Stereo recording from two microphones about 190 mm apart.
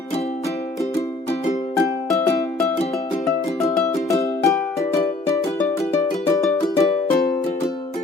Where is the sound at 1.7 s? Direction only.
15° left (ahead or behind).